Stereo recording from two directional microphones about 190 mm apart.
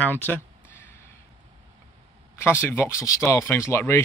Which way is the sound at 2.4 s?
10° left (ahead or behind).